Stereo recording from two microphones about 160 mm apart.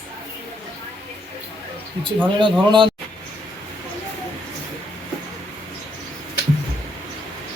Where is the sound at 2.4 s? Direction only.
30° right (ahead or behind).